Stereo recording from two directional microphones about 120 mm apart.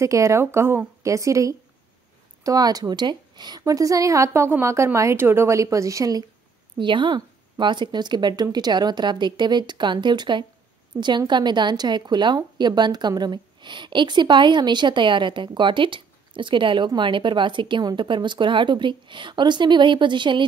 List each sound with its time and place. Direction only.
0.0 s a woman's voice: 25° right (ahead or behind)
6.8 s speech: 40° right (ahead or behind)